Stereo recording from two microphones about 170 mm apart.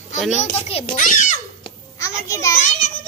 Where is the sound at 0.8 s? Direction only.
50° left (ahead or behind).